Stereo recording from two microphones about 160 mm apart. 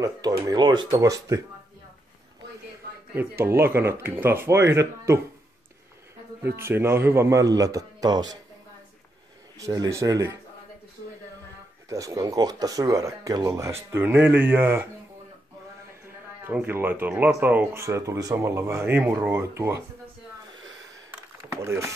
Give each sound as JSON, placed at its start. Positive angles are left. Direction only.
{"t": 0.5, "sound": "a man's voice", "side_deg": -25}
{"t": 3.2, "sound": "speech", "side_deg": -15}
{"t": 6.6, "sound": "a man's voice", "side_deg": -15}
{"t": 9.6, "sound": "a man's voice", "side_deg": -20}
{"t": 11.9, "sound": "a man's voice", "side_deg": -20}
{"t": 16.6, "sound": "speech", "side_deg": -15}
{"t": 21.5, "sound": "speech", "side_deg": -15}